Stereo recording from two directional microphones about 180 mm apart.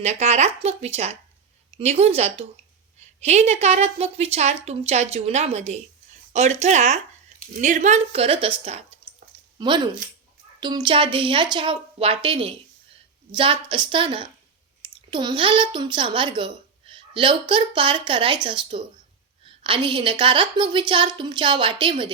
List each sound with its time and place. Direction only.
0.0 s a woman's voice: 35° right (ahead or behind)